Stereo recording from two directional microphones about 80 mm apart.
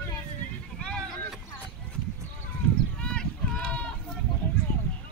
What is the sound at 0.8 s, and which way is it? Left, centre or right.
Boat, centre.